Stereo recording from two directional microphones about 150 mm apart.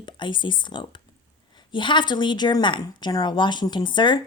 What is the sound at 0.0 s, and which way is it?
A woman's voice, 30° left (ahead or behind).